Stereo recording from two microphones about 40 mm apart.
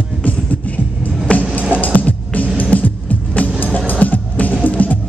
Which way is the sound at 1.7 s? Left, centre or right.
Left.